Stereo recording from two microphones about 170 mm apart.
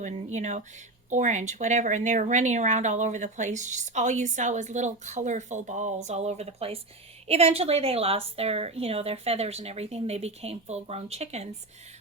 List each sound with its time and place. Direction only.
0.0 s speech: 45° right (ahead or behind)